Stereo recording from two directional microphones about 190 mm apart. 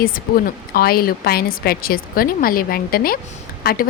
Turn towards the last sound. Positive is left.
turn(degrees=55)  # may be behind; listen again after turning